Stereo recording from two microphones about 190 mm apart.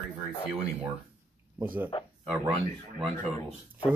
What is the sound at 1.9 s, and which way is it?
Speech, 30° left (ahead or behind).